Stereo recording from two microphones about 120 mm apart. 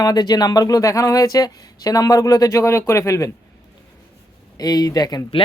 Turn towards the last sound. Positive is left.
turn(degrees=35)  # may be behind; listen again after turning